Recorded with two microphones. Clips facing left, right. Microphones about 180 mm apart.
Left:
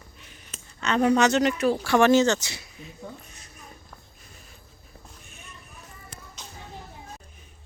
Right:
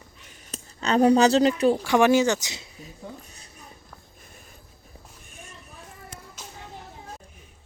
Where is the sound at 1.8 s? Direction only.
15° right (ahead or behind).